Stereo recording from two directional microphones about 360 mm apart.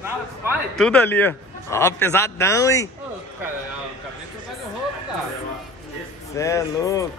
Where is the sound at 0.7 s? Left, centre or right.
Centre.